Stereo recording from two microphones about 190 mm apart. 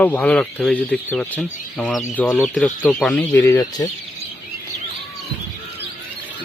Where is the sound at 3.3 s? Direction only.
15° left (ahead or behind).